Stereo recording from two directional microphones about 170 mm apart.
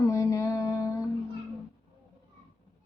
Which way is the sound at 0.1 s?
20° left (ahead or behind).